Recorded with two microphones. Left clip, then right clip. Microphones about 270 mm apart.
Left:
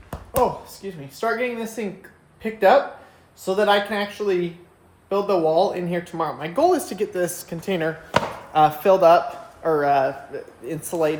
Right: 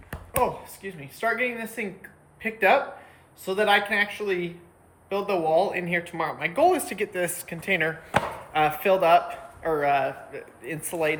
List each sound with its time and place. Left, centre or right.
0.1 s speech: centre